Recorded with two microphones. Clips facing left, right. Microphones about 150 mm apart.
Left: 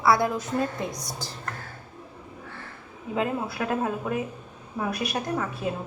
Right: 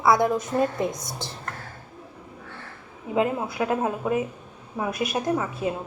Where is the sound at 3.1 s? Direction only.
20° right (ahead or behind).